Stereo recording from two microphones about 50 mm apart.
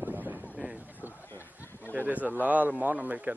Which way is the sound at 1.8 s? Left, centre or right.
Right.